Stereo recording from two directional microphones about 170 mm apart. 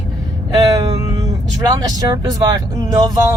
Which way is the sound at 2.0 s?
20° right (ahead or behind).